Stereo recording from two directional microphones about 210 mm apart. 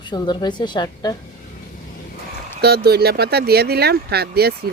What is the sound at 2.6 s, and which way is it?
Speech, 50° right (ahead or behind).